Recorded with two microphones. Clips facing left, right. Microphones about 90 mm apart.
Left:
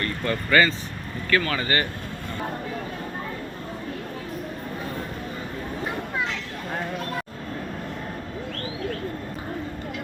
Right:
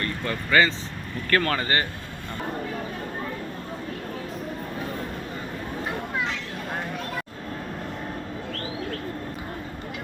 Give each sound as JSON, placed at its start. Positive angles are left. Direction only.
{"t": 0.0, "sound": "speech", "side_deg": -15}
{"t": 1.3, "sound": "speech", "side_deg": -45}
{"t": 1.5, "sound": "speech", "side_deg": -30}